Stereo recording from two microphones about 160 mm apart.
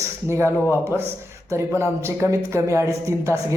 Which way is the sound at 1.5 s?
15° right (ahead or behind).